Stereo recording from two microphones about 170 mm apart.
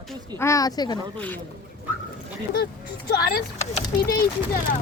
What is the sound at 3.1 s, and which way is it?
Speech, 65° left (ahead or behind).